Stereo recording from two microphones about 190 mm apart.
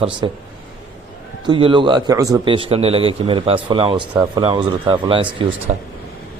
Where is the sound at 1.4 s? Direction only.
25° right (ahead or behind).